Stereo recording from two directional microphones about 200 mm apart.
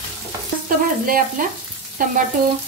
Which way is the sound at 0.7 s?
45° right (ahead or behind).